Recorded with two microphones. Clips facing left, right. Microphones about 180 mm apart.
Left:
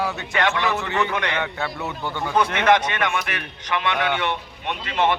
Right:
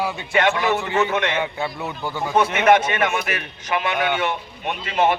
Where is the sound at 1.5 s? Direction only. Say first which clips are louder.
Right 1 dB; 10° right (ahead or behind).